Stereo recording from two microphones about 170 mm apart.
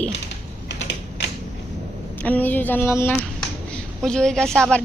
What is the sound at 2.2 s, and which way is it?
Speech, 10° left (ahead or behind).